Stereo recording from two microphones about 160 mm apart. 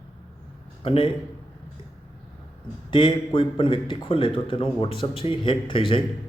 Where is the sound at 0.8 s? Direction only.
30° left (ahead or behind).